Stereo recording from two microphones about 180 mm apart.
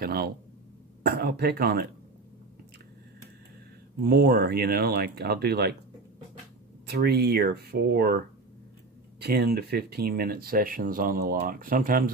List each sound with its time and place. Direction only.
0.0 s speech: 55° right (ahead or behind)
4.0 s speech: 60° right (ahead or behind)
6.9 s speech: 65° right (ahead or behind)
9.2 s speech: 60° right (ahead or behind)